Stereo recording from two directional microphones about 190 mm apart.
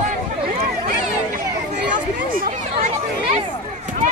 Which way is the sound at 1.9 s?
45° right (ahead or behind).